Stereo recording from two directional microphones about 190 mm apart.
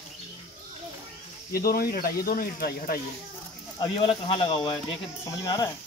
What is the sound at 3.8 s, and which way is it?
Speech, 25° left (ahead or behind).